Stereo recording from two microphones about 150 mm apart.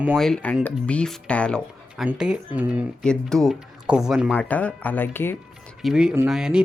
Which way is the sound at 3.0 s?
5° left (ahead or behind).